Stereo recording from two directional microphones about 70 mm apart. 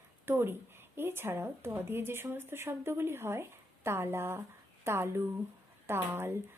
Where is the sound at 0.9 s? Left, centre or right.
Right.